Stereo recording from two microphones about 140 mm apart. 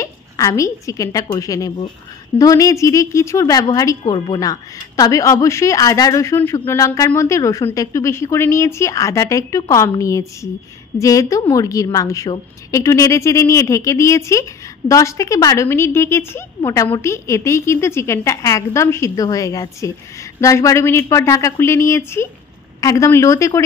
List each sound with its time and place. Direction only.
0.0 s a woman's voice: 20° left (ahead or behind)